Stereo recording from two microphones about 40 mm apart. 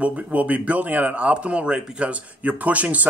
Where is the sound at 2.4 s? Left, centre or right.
Right.